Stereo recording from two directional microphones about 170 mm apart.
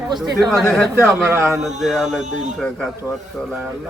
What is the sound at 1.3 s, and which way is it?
Speech, 15° right (ahead or behind).